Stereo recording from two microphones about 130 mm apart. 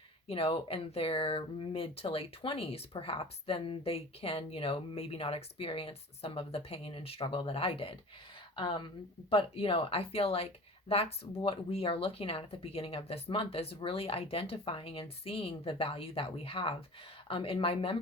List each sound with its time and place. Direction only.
0.3 s speech: 45° left (ahead or behind)